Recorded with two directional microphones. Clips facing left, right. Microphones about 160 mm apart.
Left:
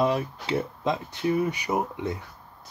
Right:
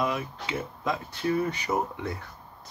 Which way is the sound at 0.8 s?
20° left (ahead or behind).